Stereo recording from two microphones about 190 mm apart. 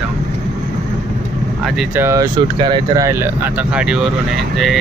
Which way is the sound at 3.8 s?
5° right (ahead or behind).